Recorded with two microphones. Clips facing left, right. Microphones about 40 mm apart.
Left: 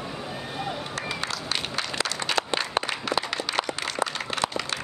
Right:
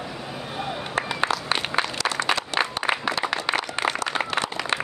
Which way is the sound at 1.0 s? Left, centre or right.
Right.